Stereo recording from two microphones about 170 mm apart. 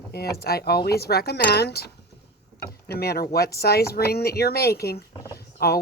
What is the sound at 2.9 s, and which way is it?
Speech, 65° left (ahead or behind).